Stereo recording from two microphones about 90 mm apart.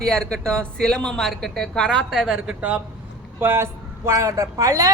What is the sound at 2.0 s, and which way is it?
Speech, centre (ahead or behind).